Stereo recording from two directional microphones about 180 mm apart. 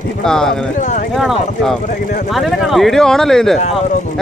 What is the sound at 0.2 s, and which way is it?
Speech, 5° left (ahead or behind).